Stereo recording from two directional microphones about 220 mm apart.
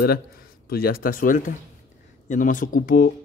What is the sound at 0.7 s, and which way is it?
Speech, 45° left (ahead or behind).